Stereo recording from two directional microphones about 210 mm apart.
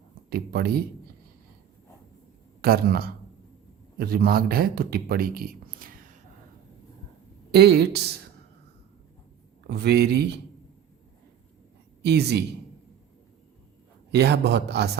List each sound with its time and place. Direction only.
0.3 s a man's voice: 45° right (ahead or behind)
2.6 s a man's voice: 45° right (ahead or behind)
7.5 s a man's voice: 50° right (ahead or behind)
9.6 s a man's voice: 50° right (ahead or behind)
12.0 s a man's voice: 50° right (ahead or behind)
14.1 s a man's voice: 50° right (ahead or behind)